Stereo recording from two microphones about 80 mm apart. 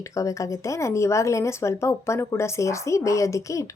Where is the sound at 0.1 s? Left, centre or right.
Left.